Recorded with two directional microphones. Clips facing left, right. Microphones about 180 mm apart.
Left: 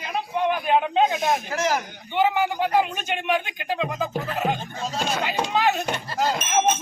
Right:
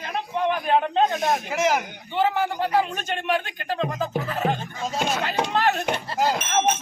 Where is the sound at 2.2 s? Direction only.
5° left (ahead or behind).